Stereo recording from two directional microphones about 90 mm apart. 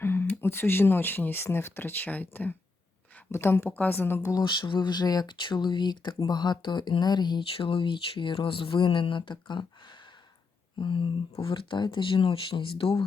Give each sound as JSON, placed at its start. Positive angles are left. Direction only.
{"t": 0.0, "sound": "a sound", "side_deg": 25}
{"t": 0.3, "sound": "speech", "side_deg": 25}
{"t": 4.2, "sound": "speech", "side_deg": 40}
{"t": 4.4, "sound": "speech", "side_deg": 60}
{"t": 10.8, "sound": "speech", "side_deg": 70}